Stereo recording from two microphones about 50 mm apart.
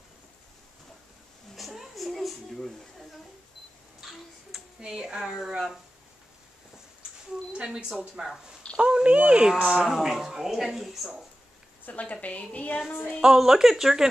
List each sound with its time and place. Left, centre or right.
1.6 s a sound: centre
4.0 s a sound: centre
4.7 s speech: centre
7.5 s speech: centre
9.8 s a woman's voice: centre
11.8 s a woman's voice: left
13.2 s speech: centre